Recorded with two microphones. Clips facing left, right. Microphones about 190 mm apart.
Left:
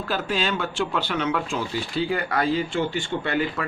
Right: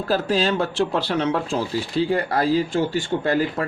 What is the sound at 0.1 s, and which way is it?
Speech, 35° right (ahead or behind).